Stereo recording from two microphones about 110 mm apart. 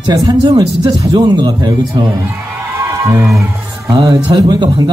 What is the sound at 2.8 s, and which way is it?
Music, 30° right (ahead or behind).